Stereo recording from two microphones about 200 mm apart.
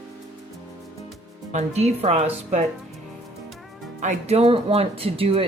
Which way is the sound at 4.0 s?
35° right (ahead or behind).